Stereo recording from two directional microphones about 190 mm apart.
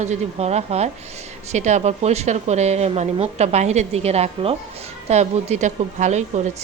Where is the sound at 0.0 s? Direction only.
35° right (ahead or behind).